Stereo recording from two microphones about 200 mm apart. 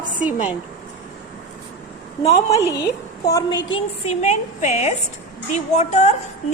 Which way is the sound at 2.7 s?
15° left (ahead or behind).